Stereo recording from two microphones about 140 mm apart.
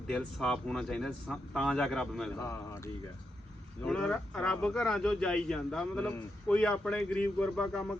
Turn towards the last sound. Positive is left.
turn(degrees=5)  # may be behind; listen again after turning